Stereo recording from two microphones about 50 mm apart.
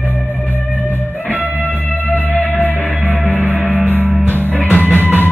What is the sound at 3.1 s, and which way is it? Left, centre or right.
Music, centre.